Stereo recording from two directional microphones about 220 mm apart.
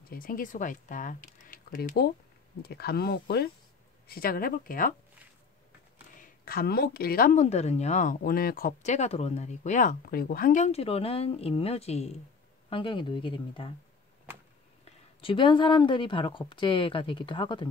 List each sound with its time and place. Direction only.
0.1 s speech: 40° left (ahead or behind)
6.4 s speech: 45° left (ahead or behind); by 13.7 s 25° left (ahead or behind)
15.1 s speech: 25° left (ahead or behind)